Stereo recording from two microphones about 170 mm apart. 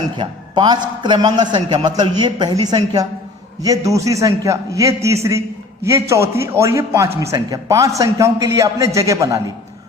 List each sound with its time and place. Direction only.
0.2 s a man's voice: 25° right (ahead or behind)